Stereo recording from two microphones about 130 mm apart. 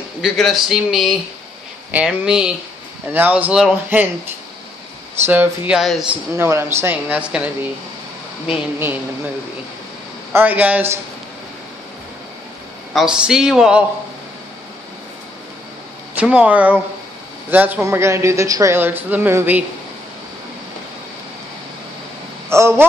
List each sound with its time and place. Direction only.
0.2 s a man's voice: centre (ahead or behind)
5.2 s speech: 15° right (ahead or behind)
5.8 s a man's voice: 5° right (ahead or behind)
6.3 s speech: 20° right (ahead or behind)
8.5 s speech: 15° right (ahead or behind)
10.3 s speech: 15° right (ahead or behind)
12.9 s a man's voice: 5° right (ahead or behind)
16.2 s speech: 10° right (ahead or behind)
22.5 s a man's voice: 20° right (ahead or behind)